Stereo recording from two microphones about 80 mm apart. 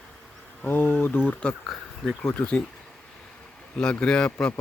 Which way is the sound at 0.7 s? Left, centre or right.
Left.